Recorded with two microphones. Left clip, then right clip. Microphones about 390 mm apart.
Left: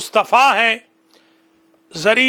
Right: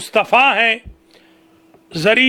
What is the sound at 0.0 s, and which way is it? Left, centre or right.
A man's voice, left.